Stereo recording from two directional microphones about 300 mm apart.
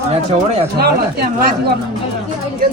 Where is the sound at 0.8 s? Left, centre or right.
Right.